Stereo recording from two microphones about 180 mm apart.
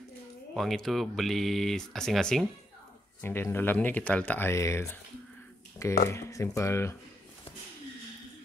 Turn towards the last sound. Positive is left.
turn(degrees=15)  # may be behind; listen again after turning